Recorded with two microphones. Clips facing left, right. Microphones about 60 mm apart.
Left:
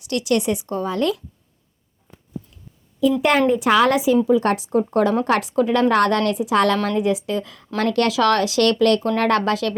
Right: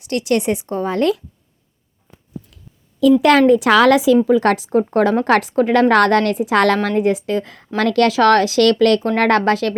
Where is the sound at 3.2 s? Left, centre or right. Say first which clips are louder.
Right 5 dB; right.